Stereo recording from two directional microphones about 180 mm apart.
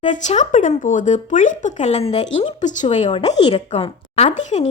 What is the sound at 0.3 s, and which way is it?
A woman's voice, 45° left (ahead or behind).